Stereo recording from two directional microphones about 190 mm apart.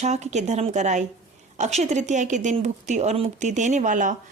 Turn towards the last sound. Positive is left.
turn(degrees=-40)  # may be behind; listen again after turning